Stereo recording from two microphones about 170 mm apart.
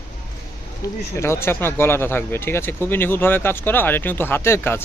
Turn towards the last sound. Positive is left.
turn(degrees=15)  # may be behind; listen again after turning